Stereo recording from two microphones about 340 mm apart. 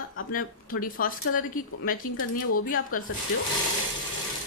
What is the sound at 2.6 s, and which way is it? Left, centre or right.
Speech, left.